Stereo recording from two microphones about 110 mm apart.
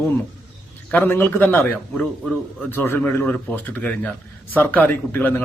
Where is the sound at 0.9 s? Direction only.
15° left (ahead or behind).